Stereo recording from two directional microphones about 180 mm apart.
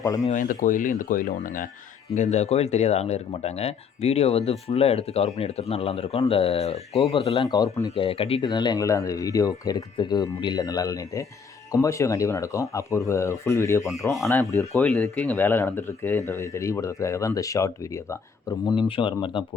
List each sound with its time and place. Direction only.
0.0 s speech: 20° left (ahead or behind)
0.3 s speech: 45° left (ahead or behind)
7.4 s speech: 20° left (ahead or behind)
14.8 s speech: 5° left (ahead or behind); by 19.5 s 25° left (ahead or behind)